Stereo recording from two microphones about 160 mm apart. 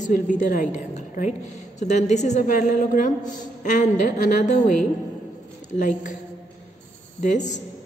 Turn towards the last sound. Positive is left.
turn(degrees=50)  # may be behind; listen again after turning